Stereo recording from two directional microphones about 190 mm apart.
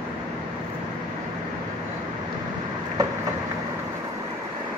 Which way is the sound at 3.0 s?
20° right (ahead or behind).